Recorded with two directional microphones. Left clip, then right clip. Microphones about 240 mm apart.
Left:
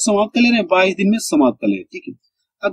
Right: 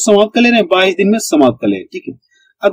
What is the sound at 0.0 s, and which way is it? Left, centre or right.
Speech, centre.